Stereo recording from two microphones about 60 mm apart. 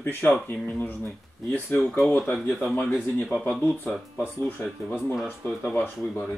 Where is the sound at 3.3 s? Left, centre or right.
Left.